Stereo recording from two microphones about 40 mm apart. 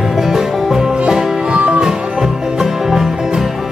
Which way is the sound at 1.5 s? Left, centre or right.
Right.